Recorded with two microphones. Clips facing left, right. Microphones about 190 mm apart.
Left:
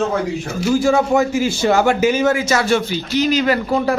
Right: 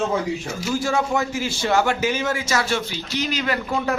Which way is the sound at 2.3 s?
60° left (ahead or behind).